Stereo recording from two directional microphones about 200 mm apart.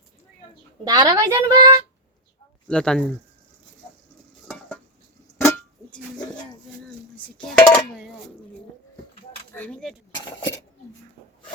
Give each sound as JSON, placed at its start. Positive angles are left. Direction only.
{"t": 0.9, "sound": "a woman's voice", "side_deg": -20}
{"t": 2.6, "sound": "dishes", "side_deg": 5}
{"t": 4.4, "sound": "cutlery", "side_deg": 5}
{"t": 5.4, "sound": "music", "side_deg": 15}
{"t": 7.4, "sound": "dishes", "side_deg": 5}
{"t": 9.6, "sound": "dishes", "side_deg": 5}